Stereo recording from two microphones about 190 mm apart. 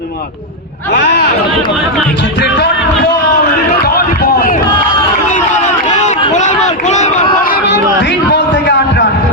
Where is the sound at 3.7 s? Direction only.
55° left (ahead or behind).